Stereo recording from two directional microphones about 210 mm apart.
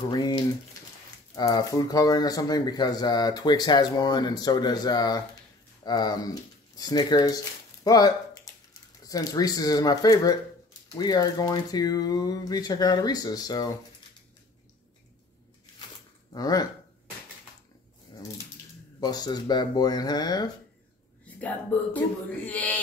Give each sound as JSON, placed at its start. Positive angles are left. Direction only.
{"t": 0.1, "sound": "a sound", "side_deg": 20}
{"t": 1.3, "sound": "speech", "side_deg": 15}
{"t": 16.3, "sound": "speech", "side_deg": 20}
{"t": 18.9, "sound": "speech", "side_deg": 20}
{"t": 21.4, "sound": "speech", "side_deg": 5}